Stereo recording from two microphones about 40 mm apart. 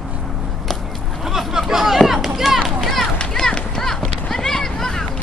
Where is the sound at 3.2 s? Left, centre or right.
Centre.